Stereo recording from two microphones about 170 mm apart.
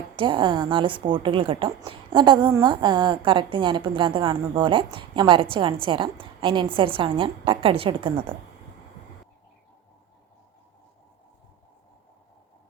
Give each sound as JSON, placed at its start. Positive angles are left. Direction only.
{"t": 0.2, "sound": "a woman's voice", "side_deg": -30}